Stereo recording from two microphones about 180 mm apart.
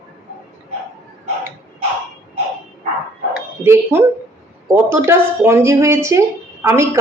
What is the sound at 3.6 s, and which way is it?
Speech, 15° right (ahead or behind).